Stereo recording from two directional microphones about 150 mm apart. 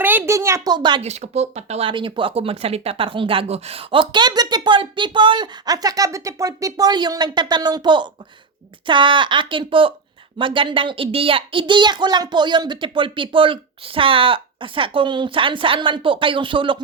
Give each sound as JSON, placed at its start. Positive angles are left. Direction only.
{"t": 0.0, "sound": "a woman's voice", "side_deg": -10}
{"t": 1.0, "sound": "speech", "side_deg": -50}